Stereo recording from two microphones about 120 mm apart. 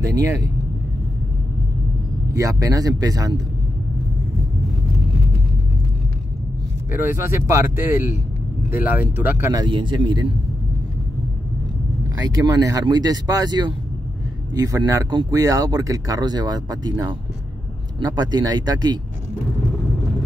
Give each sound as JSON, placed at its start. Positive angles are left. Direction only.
{"t": 2.3, "sound": "speech", "side_deg": -30}
{"t": 6.9, "sound": "speech", "side_deg": -20}
{"t": 9.7, "sound": "speech", "side_deg": -40}
{"t": 12.2, "sound": "speech", "side_deg": -30}